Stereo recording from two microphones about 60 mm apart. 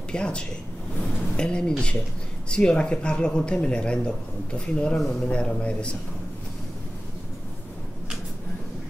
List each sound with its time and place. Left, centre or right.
0.1 s speech: centre